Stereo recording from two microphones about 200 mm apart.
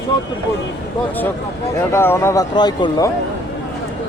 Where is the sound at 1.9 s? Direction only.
10° left (ahead or behind).